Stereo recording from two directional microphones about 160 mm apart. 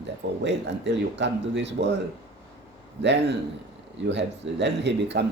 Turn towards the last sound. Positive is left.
turn(degrees=-90)